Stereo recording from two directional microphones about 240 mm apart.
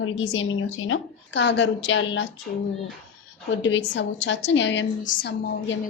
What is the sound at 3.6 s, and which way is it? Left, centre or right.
A woman's voice, left.